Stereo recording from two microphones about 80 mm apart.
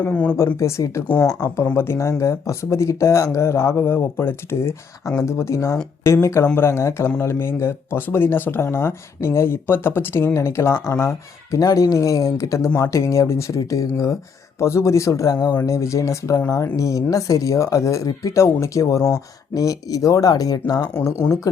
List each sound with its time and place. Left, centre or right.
0.0 s speech: left
0.3 s speech: left
11.5 s speech: left
15.6 s speech: left
20.9 s speech: left